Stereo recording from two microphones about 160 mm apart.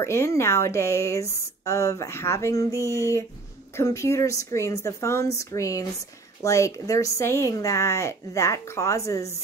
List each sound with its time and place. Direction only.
0.0 s a woman's voice: 15° left (ahead or behind)